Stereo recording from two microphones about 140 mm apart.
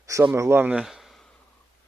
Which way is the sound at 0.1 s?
20° right (ahead or behind).